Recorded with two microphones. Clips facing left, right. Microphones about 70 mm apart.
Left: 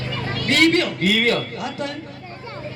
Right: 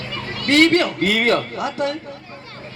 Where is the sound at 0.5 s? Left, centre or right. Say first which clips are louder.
Right 3 dB; right.